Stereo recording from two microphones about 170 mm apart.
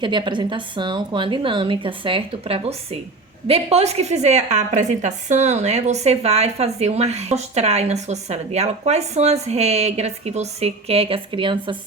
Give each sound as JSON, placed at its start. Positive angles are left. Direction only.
{"t": 0.0, "sound": "a woman's voice", "side_deg": -30}